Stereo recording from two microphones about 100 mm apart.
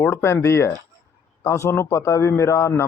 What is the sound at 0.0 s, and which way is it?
Speech, 25° left (ahead or behind).